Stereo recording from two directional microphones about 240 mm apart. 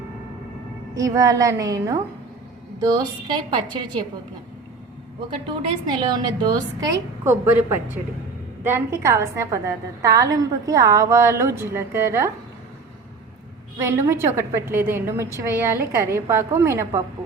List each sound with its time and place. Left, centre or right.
0.9 s a woman's voice: centre
5.6 s a woman's voice: centre
8.6 s a woman's voice: centre
13.7 s a woman's voice: centre